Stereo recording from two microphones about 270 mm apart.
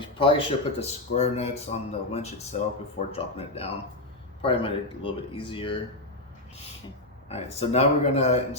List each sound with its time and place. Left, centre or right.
0.0 s speech: centre
7.3 s speech: left